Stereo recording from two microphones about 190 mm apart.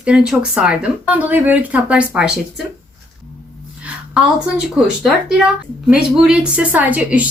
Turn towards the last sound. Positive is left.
turn(degrees=-10)  # may be behind; listen again after turning